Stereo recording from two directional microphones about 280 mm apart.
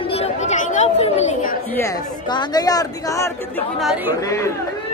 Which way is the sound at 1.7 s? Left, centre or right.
Centre.